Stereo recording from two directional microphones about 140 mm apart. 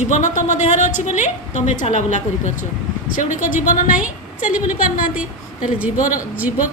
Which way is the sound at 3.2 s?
65° left (ahead or behind).